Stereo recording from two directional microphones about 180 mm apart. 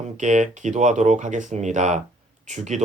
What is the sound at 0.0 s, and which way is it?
Speech, 40° right (ahead or behind).